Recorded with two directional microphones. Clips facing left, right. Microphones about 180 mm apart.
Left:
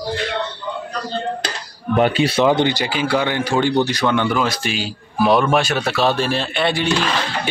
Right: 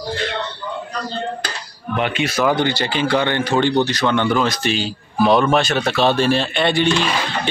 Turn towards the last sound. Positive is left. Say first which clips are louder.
# right 2 dB
turn(degrees=5)  # may be behind; listen again after turning